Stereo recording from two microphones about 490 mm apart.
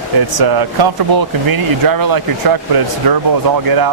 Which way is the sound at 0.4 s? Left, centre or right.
Right.